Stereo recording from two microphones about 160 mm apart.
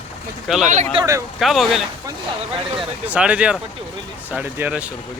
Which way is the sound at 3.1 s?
5° right (ahead or behind).